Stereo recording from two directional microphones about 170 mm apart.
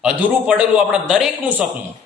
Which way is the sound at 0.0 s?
5° right (ahead or behind).